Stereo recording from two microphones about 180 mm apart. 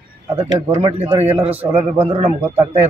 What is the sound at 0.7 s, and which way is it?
A man's voice, 35° right (ahead or behind).